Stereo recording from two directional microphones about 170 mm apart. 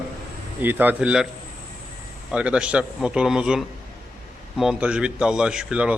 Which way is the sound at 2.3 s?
5° right (ahead or behind).